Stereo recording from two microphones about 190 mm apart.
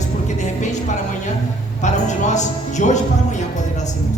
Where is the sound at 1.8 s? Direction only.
40° left (ahead or behind).